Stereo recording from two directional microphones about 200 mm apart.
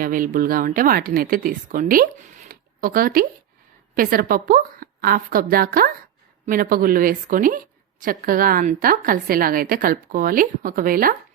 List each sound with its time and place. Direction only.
0.0 s a woman's voice: 45° right (ahead or behind)
2.5 s zipper: 45° right (ahead or behind)
3.9 s a woman's voice: 45° right (ahead or behind)